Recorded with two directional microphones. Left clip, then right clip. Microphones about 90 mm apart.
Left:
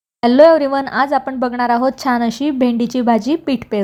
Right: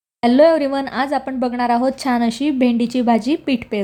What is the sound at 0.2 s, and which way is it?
A woman's voice, 30° left (ahead or behind).